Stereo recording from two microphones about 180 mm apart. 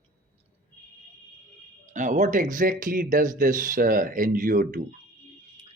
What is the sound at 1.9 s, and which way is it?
Speech, 45° right (ahead or behind).